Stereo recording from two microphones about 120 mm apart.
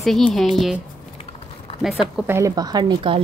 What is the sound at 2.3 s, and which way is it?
Speech, 30° right (ahead or behind).